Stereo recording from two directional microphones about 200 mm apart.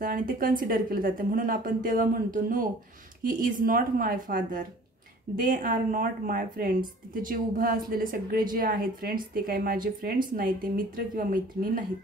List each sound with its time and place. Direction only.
0.0 s speech: 45° right (ahead or behind)